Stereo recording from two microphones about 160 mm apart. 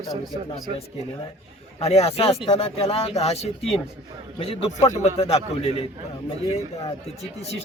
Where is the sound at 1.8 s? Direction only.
40° left (ahead or behind).